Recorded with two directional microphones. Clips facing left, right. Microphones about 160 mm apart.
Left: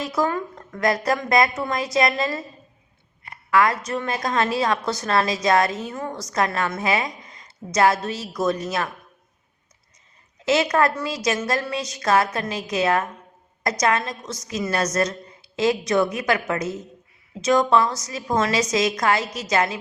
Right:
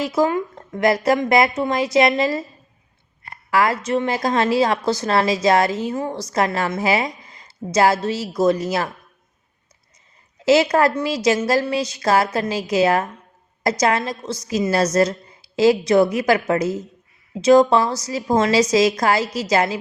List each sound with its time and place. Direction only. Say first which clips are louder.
0.0 s a woman's voice: right 4 dB; 20° right (ahead or behind)
4.8 s a woman's voice: right 5 dB; centre (ahead or behind)
5.0 s a woman's voice: right 3 dB; 25° right (ahead or behind)
10.4 s a woman's voice: right 4 dB; 30° right (ahead or behind)